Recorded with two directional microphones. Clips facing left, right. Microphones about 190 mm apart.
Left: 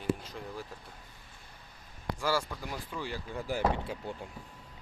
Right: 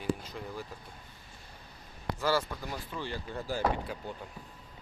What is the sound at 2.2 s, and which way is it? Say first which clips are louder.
Speech: right 2 dB; 10° left (ahead or behind).